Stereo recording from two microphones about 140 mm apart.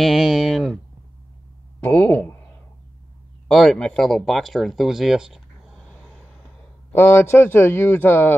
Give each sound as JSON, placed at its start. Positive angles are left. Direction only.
{"t": 0.0, "sound": "speech", "side_deg": 0}
{"t": 1.9, "sound": "a man's voice", "side_deg": 10}
{"t": 3.4, "sound": "a man's voice", "side_deg": 5}